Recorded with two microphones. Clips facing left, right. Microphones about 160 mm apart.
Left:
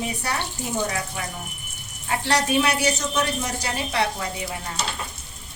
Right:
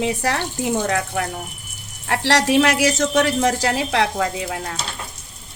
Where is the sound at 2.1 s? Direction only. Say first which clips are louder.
Right 5 dB; 90° right.